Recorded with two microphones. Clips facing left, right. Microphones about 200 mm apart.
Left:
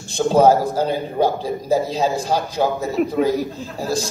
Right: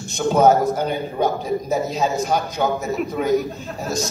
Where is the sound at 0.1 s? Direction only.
30° left (ahead or behind).